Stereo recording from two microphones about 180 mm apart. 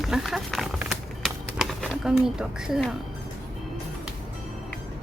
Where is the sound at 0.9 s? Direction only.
Centre (ahead or behind).